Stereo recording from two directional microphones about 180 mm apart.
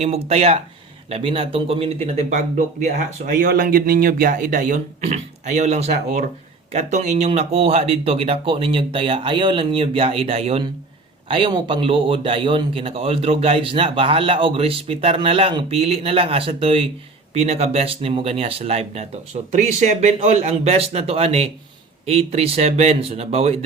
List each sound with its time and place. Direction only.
0.0 s speech: 35° right (ahead or behind)